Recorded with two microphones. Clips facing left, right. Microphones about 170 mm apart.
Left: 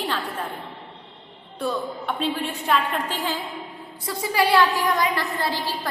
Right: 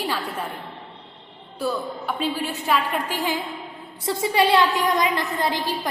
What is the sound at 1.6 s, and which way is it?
A woman's voice, 5° right (ahead or behind).